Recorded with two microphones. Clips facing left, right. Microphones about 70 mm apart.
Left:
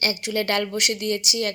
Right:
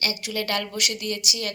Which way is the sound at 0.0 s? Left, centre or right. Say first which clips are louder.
Left 4 dB; left.